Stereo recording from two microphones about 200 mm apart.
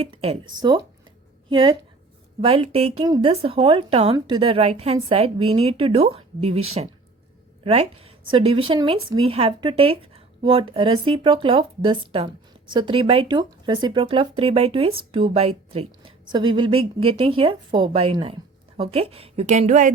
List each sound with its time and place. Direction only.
0.0 s a woman's voice: 30° right (ahead or behind)
7.6 s a woman's voice: 30° right (ahead or behind)